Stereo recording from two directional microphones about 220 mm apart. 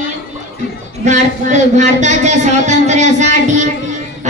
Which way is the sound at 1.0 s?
35° right (ahead or behind).